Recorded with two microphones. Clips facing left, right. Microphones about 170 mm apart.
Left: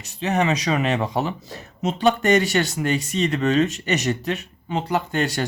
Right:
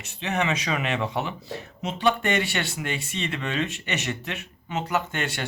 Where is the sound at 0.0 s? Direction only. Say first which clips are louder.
Left 5 dB; 40° left (ahead or behind).